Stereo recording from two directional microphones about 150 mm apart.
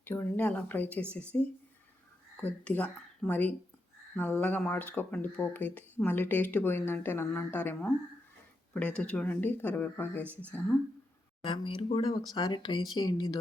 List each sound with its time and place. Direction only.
0.0 s speech: 10° left (ahead or behind)
11.4 s speech: 35° left (ahead or behind)